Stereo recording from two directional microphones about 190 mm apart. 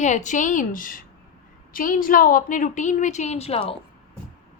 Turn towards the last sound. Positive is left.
turn(degrees=30)  # may be behind; listen again after turning